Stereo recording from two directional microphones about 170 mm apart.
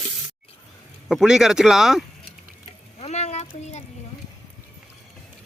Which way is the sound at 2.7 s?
40° left (ahead or behind).